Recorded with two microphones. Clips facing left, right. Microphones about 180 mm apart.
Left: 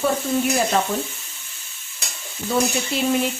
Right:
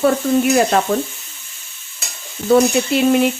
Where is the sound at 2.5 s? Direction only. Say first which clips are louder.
Right 9 dB; 65° right (ahead or behind).